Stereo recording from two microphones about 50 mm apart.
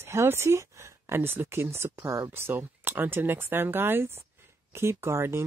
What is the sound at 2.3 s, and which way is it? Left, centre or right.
Speech, right.